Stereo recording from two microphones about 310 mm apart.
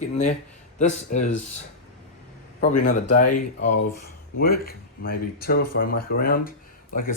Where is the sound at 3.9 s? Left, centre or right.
Left.